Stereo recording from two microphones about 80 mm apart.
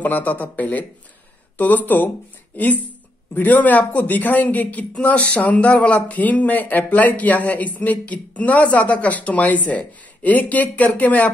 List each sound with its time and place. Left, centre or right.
0.0 s a man's voice: left